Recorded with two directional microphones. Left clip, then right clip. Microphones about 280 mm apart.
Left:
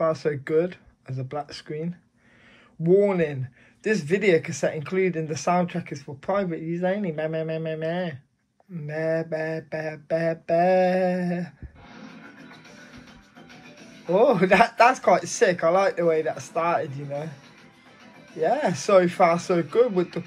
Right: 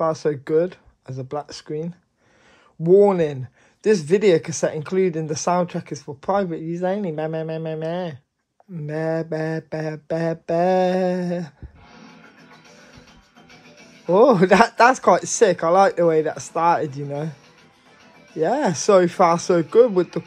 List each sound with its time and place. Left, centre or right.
0.0 s speech: centre
14.1 s speech: right
18.4 s speech: right